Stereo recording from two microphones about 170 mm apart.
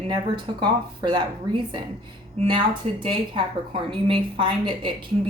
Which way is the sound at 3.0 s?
30° right (ahead or behind).